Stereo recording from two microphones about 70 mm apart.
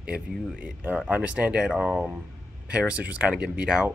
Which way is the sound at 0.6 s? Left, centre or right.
Right.